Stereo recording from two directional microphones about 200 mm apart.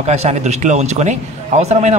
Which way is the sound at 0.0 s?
35° right (ahead or behind).